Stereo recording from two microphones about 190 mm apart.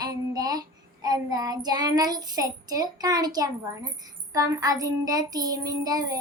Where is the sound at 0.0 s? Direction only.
20° right (ahead or behind).